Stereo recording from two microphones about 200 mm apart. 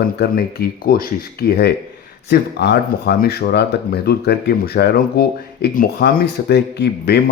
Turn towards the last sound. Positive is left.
turn(degrees=55)  # may be behind; listen again after turning